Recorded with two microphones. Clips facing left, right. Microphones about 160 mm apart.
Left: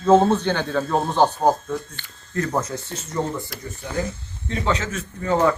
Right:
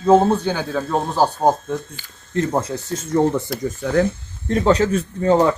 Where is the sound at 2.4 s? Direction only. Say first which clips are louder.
Right 4 dB; 30° right (ahead or behind).